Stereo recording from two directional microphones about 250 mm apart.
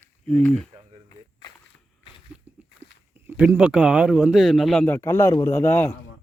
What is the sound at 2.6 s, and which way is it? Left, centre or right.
Walk, centre.